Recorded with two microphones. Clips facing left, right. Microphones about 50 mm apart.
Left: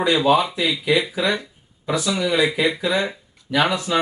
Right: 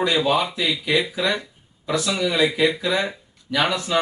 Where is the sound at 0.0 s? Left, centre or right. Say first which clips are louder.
Left 3 dB; centre.